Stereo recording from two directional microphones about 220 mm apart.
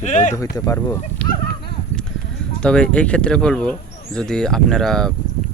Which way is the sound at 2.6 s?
5° left (ahead or behind).